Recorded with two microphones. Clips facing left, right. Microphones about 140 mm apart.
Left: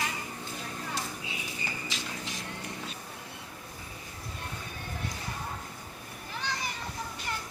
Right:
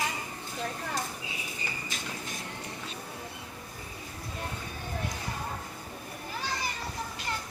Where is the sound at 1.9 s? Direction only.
50° right (ahead or behind).